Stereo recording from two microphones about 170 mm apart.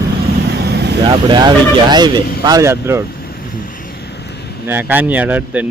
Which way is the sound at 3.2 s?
60° left (ahead or behind).